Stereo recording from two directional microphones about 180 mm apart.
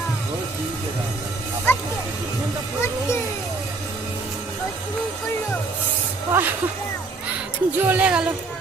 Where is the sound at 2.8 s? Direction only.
15° left (ahead or behind).